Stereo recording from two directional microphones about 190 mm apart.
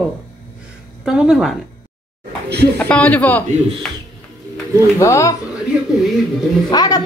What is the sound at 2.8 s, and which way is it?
A man's voice, 5° left (ahead or behind).